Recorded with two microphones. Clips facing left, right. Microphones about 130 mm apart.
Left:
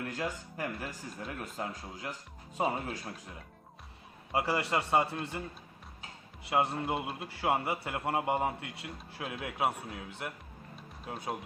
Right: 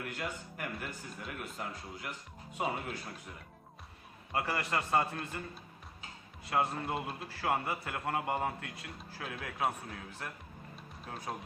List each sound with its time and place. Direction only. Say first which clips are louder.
0.1 s speech: left 4 dB; 30° left (ahead or behind)
4.3 s a man's voice: left 4 dB; 20° left (ahead or behind)
6.5 s a man's voice: left 3 dB; 25° left (ahead or behind)
11.0 s speech: left 4 dB; 5° left (ahead or behind)